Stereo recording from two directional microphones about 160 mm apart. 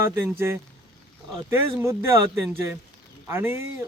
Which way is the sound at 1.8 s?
15° right (ahead or behind).